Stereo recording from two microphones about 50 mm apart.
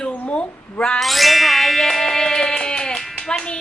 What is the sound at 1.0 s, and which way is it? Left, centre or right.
Music, centre.